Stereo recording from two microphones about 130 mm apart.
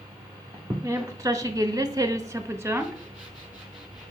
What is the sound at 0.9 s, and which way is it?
A woman's voice, 25° right (ahead or behind).